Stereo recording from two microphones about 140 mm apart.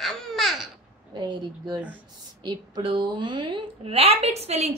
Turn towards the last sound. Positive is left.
turn(degrees=-50)  # may be behind; listen again after turning